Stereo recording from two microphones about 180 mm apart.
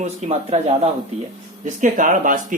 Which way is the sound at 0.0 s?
40° right (ahead or behind).